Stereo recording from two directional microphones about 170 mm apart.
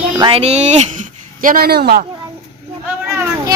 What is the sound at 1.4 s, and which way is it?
Speech, 55° right (ahead or behind).